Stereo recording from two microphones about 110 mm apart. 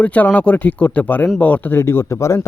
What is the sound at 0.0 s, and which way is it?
A man's voice, 15° left (ahead or behind).